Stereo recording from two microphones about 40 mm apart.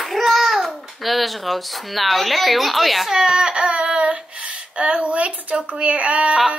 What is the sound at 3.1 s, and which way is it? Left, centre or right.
Child singing, centre.